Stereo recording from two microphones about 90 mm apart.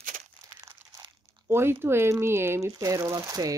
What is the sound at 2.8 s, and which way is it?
Speech, 40° right (ahead or behind).